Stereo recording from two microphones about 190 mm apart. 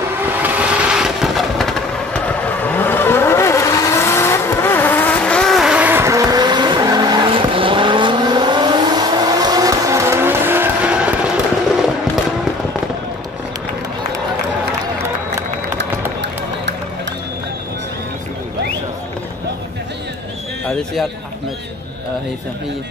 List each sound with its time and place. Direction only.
0.2 s vehicle: 10° right (ahead or behind)
15.8 s music: 65° right (ahead or behind)
20.6 s a man's voice: centre (ahead or behind)